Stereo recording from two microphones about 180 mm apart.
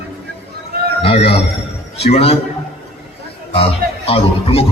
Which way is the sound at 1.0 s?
35° left (ahead or behind).